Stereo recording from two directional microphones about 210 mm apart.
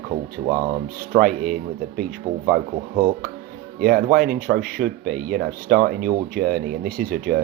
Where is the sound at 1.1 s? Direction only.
45° right (ahead or behind).